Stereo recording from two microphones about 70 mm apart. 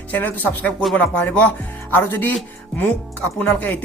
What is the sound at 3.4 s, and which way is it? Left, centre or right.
Speech, left.